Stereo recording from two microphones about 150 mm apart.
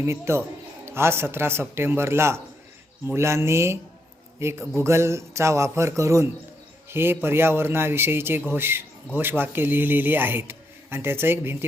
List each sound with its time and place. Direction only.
0.0 s a man's voice: 15° right (ahead or behind)